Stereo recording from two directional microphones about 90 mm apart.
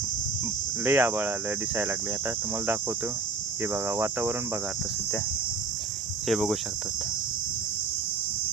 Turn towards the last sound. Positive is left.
turn(degrees=0)  # may be behind; listen again after turning